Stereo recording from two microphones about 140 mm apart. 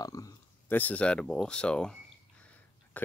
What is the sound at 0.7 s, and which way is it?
Speech, 10° left (ahead or behind).